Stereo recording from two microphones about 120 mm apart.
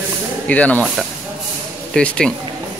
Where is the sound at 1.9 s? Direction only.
5° left (ahead or behind).